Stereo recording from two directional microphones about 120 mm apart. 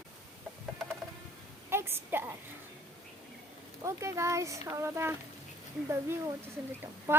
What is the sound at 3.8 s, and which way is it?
Speech, 25° right (ahead or behind).